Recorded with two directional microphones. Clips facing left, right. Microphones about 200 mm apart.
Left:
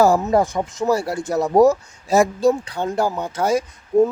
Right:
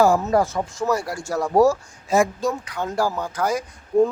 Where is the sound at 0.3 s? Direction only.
20° left (ahead or behind).